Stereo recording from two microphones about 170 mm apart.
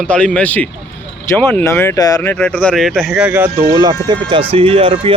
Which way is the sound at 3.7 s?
25° right (ahead or behind).